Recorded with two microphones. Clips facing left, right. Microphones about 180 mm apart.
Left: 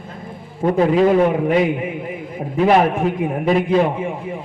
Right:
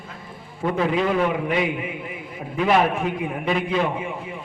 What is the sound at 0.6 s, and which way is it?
A man's voice, 40° left (ahead or behind).